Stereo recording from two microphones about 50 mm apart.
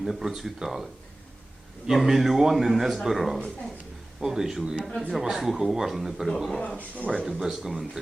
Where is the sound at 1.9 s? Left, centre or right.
Centre.